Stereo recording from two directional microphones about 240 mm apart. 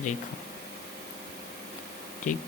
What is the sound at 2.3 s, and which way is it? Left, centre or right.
Speech, left.